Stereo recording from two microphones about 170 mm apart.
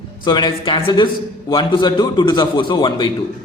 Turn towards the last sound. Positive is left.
turn(degrees=25)  # may be behind; listen again after turning